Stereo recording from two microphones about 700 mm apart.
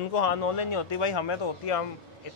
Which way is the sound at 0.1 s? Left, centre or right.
Left.